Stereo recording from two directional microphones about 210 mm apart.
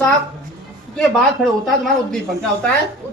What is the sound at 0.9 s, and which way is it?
Speech, 5° left (ahead or behind).